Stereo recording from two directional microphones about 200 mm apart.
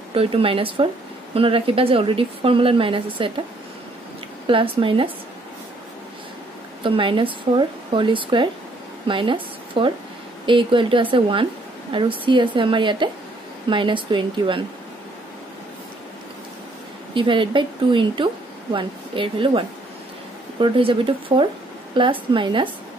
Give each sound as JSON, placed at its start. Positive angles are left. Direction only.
{"t": 0.1, "sound": "speech", "side_deg": -25}
{"t": 4.5, "sound": "speech", "side_deg": -25}
{"t": 6.8, "sound": "a woman's voice", "side_deg": -25}
{"t": 17.1, "sound": "speech", "side_deg": -25}
{"t": 20.6, "sound": "speech", "side_deg": -25}